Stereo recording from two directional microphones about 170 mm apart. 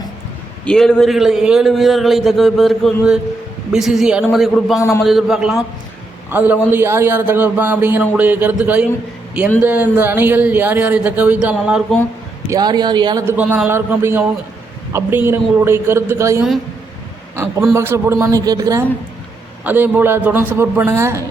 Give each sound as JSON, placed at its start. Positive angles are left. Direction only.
{"t": 0.6, "sound": "a man's voice", "side_deg": 5}
{"t": 12.5, "sound": "speech", "side_deg": -25}
{"t": 13.2, "sound": "speech", "side_deg": -10}